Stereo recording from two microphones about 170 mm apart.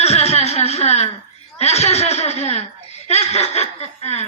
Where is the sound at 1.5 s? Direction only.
40° left (ahead or behind).